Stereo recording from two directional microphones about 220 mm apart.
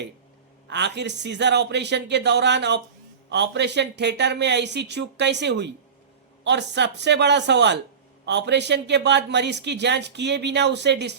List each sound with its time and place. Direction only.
0.7 s a man's voice: 50° right (ahead or behind)